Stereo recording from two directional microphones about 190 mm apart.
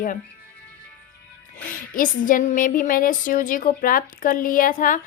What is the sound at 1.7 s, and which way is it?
A woman's voice, 45° left (ahead or behind).